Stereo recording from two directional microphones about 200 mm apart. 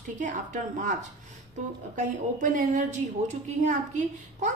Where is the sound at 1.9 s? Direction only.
40° right (ahead or behind).